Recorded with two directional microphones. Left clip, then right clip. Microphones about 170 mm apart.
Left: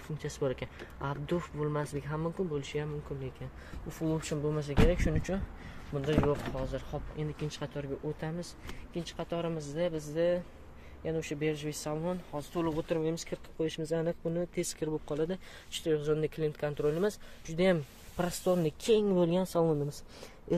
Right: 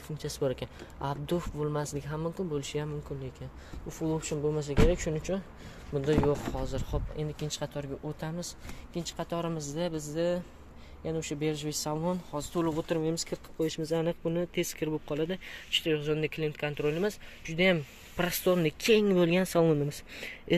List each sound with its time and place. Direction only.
0.2 s speech: 10° right (ahead or behind)
2.5 s speech: 20° right (ahead or behind)
4.0 s speech: centre (ahead or behind)
4.6 s speech: 10° right (ahead or behind)
5.9 s speech: 15° right (ahead or behind); by 18.2 s centre (ahead or behind)
18.2 s speech: 15° right (ahead or behind)
19.6 s speech: 25° right (ahead or behind)